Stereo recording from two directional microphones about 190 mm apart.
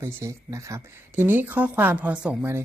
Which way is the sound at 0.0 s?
15° right (ahead or behind).